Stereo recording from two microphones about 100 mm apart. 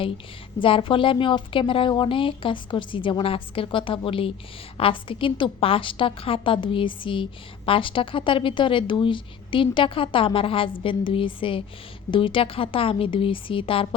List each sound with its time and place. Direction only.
0.6 s a woman's voice: 60° left (ahead or behind)